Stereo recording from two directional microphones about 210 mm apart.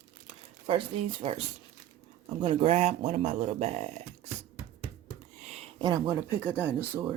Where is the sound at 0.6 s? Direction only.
25° right (ahead or behind).